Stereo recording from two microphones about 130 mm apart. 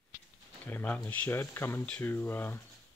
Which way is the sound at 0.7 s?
10° left (ahead or behind).